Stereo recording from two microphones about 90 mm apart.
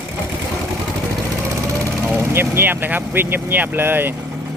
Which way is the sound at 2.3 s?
25° right (ahead or behind).